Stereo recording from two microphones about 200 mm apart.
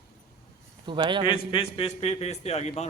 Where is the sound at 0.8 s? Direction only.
25° right (ahead or behind).